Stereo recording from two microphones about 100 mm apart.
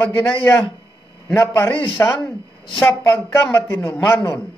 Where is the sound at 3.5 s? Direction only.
30° left (ahead or behind).